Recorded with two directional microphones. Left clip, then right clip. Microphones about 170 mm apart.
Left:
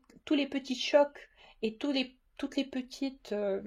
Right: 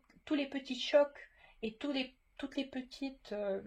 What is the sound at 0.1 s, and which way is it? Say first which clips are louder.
Speech: left 5 dB; 45° left (ahead or behind).